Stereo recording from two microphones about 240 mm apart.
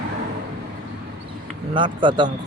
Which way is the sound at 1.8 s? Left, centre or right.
Centre.